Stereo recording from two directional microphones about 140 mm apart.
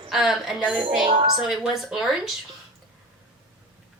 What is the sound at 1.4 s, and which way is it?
Speech, 5° right (ahead or behind).